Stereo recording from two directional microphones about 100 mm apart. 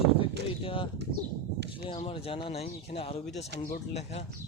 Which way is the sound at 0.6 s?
60° left (ahead or behind).